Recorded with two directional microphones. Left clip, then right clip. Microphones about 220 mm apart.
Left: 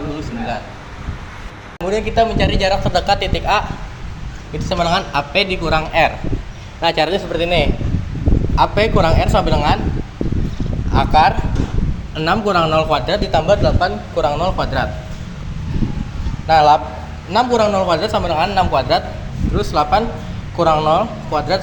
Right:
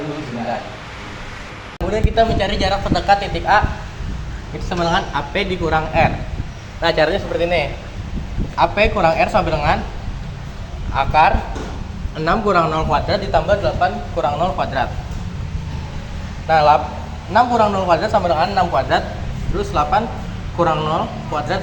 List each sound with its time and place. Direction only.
1.9 s speech: 30° left (ahead or behind)
4.8 s a man's voice: 40° left (ahead or behind)
6.8 s a man's voice: 45° left (ahead or behind)
10.9 s a man's voice: 30° left (ahead or behind)
16.5 s a man's voice: 30° left (ahead or behind)